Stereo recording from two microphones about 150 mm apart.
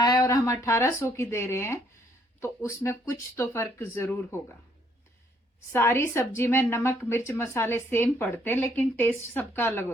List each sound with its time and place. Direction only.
0.0 s a sound: 25° left (ahead or behind)
0.6 s a woman's voice: 20° left (ahead or behind)
5.7 s a woman's voice: 15° left (ahead or behind)